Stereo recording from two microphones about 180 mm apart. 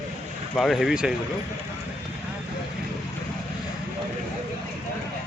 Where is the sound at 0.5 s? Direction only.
Centre (ahead or behind).